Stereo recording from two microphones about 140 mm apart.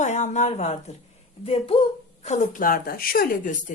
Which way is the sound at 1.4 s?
40° left (ahead or behind).